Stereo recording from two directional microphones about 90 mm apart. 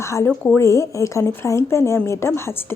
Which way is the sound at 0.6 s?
35° left (ahead or behind).